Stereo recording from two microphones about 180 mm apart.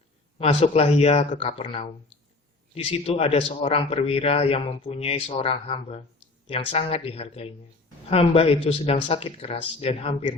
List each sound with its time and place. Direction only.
0.3 s a man's voice: 35° left (ahead or behind)